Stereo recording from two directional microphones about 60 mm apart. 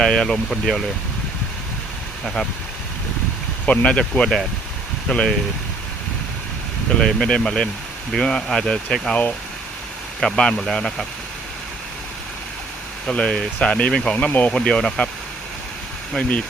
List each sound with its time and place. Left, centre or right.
0.0 s speech: centre
2.2 s speech: centre
3.7 s speech: centre
7.0 s speech: centre
10.2 s speech: centre
13.1 s speech: centre
14.5 s speech: centre